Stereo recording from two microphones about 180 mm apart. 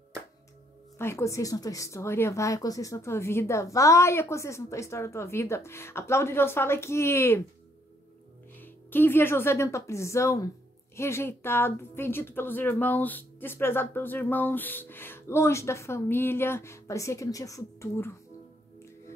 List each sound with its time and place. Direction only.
0.9 s speech: 15° left (ahead or behind)
8.5 s speech: 10° left (ahead or behind)